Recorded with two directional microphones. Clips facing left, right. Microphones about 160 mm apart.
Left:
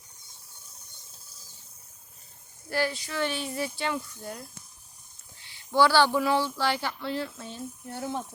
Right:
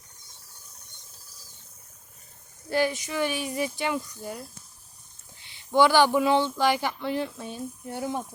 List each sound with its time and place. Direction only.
2.6 s speech: 20° right (ahead or behind)